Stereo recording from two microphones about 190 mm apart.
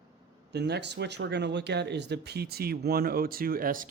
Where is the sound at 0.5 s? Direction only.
60° right (ahead or behind).